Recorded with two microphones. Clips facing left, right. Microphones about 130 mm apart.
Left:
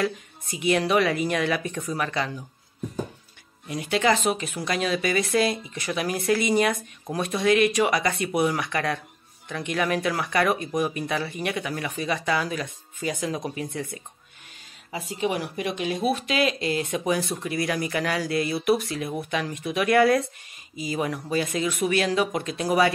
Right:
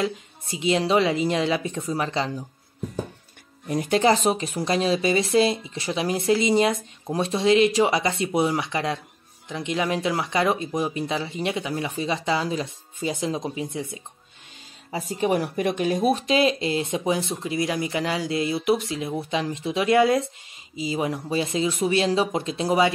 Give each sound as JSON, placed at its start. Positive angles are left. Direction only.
{"t": 0.0, "sound": "speech", "side_deg": -25}
{"t": 3.6, "sound": "speech", "side_deg": -40}
{"t": 14.9, "sound": "speech", "side_deg": -40}